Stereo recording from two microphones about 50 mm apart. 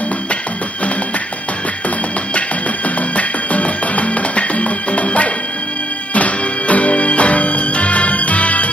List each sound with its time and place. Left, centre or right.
3.2 s music: left